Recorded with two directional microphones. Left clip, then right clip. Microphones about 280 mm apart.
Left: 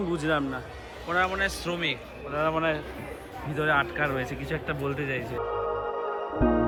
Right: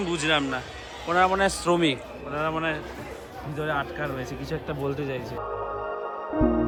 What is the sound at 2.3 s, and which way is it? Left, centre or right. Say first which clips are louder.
Speech: left 1 dB; centre.